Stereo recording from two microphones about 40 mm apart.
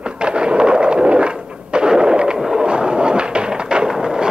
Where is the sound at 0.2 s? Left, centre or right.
Right.